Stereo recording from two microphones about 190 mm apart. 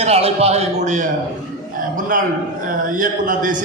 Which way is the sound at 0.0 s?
35° right (ahead or behind).